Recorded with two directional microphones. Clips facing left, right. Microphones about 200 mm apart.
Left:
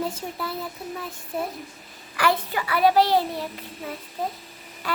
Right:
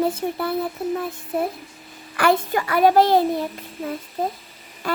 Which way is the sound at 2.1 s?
50° right (ahead or behind).